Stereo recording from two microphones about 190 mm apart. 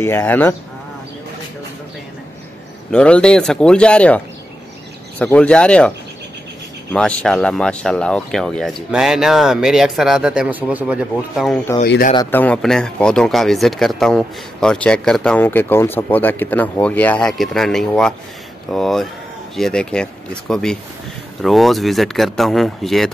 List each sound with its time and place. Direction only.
0.0 s speech: 10° left (ahead or behind)
2.9 s speech: 5° left (ahead or behind)
5.2 s speech: 5° left (ahead or behind)
11.8 s speech: 55° left (ahead or behind)
12.2 s speech: 10° left (ahead or behind)